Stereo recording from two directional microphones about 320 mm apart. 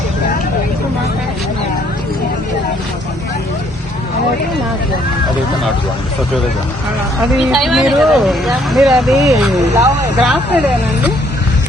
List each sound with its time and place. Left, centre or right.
7.3 s speech: centre